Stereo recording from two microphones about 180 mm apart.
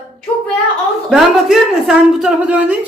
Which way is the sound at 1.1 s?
Centre (ahead or behind).